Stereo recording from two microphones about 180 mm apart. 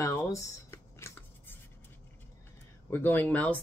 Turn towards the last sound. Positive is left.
turn(degrees=10)  # may be behind; listen again after turning